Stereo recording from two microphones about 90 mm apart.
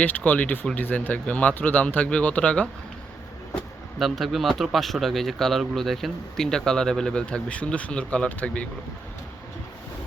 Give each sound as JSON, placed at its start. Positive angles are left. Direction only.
{"t": 0.0, "sound": "a man's voice", "side_deg": 15}
{"t": 3.9, "sound": "speech", "side_deg": 0}